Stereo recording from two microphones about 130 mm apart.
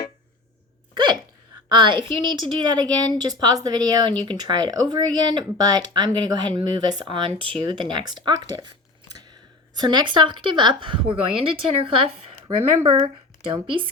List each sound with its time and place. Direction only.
0.9 s hiccup: 35° right (ahead or behind)
1.7 s a woman's voice: 35° right (ahead or behind)
9.7 s a woman's voice: 35° right (ahead or behind)